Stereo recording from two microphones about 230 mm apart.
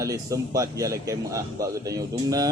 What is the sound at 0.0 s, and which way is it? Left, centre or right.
Speech, centre.